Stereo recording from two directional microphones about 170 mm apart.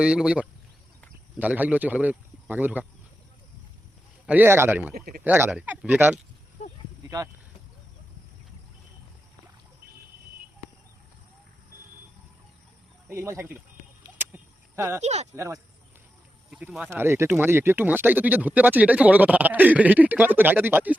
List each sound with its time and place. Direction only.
0.0 s speech: 5° right (ahead or behind)
4.3 s speech: 10° right (ahead or behind)
4.9 s speech: 65° right (ahead or behind)
5.2 s speech: 10° right (ahead or behind)
13.1 s speech: 15° right (ahead or behind)
14.2 s a sound: 15° right (ahead or behind)
15.0 s speech: 40° right (ahead or behind)
15.4 s speech: 15° right (ahead or behind)
16.5 s speech: 5° right (ahead or behind)
16.9 s speech: 15° right (ahead or behind)